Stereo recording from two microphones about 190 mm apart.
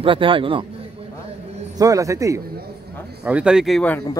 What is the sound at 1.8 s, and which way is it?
Speech, 15° right (ahead or behind).